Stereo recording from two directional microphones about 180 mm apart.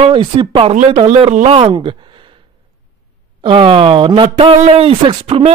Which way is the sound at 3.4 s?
30° right (ahead or behind).